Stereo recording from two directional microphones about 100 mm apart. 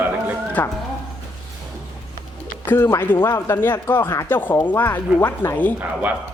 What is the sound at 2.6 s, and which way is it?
Speech, 20° left (ahead or behind).